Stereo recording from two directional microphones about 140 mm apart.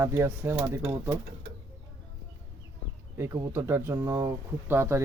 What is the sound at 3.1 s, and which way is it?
Speech, 20° right (ahead or behind).